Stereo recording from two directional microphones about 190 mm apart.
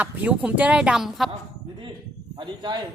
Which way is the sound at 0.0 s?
5° right (ahead or behind).